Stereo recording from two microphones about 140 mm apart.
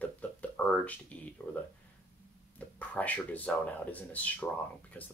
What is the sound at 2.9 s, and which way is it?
Speech, 10° left (ahead or behind).